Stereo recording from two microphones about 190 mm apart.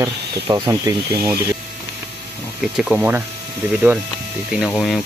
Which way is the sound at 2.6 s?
5° right (ahead or behind).